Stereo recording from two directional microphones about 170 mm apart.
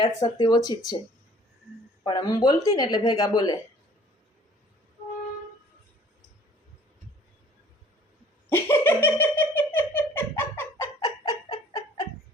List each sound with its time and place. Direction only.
0.0 s speech: 25° left (ahead or behind)
2.0 s speech: 25° left (ahead or behind)
8.4 s giggle: 15° left (ahead or behind)
11.3 s a sound: 25° left (ahead or behind)